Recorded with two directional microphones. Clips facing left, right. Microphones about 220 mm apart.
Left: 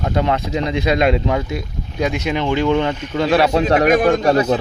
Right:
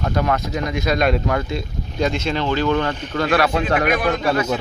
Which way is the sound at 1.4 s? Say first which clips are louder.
Left 1 dB; 10° left (ahead or behind).